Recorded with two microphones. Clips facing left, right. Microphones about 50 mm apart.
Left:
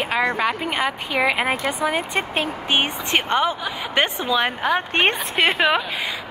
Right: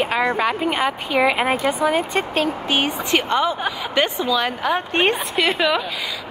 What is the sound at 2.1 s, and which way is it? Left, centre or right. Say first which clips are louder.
A woman's voice: right 3 dB; left.